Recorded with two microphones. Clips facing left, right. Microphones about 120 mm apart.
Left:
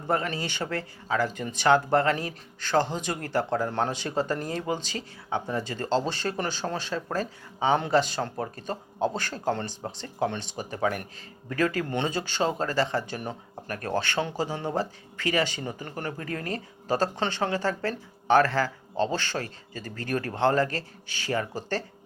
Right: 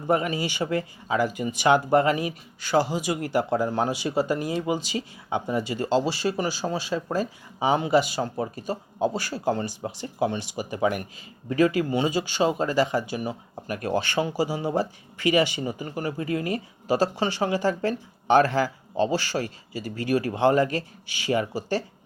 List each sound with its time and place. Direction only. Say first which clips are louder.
0.1 s speech: right 4 dB; 15° right (ahead or behind)